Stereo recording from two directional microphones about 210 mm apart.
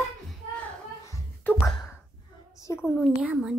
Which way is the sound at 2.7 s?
5° left (ahead or behind).